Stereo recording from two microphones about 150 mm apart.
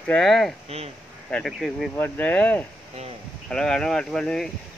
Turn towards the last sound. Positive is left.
turn(degrees=5)  # may be behind; listen again after turning